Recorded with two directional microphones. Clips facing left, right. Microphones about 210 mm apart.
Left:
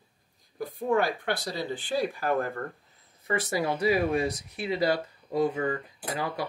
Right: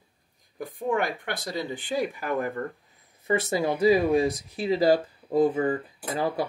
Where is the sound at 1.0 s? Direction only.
15° right (ahead or behind).